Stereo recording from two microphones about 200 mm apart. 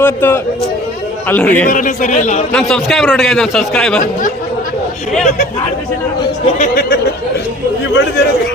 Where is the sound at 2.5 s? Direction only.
5° left (ahead or behind).